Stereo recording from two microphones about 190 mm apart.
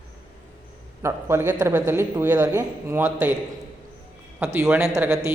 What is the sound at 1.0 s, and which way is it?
A man's voice, 15° right (ahead or behind).